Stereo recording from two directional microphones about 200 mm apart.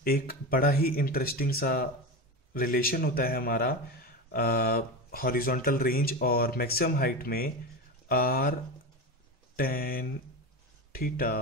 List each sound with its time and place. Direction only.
0.0 s speech: 45° left (ahead or behind)
9.6 s speech: 45° left (ahead or behind)